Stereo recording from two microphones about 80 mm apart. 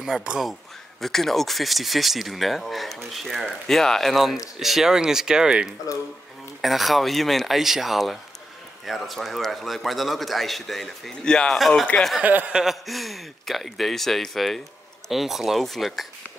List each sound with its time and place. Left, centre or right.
0.0 s speech: centre
1.0 s speech: centre
12.2 s chuckle: right
12.5 s speech: centre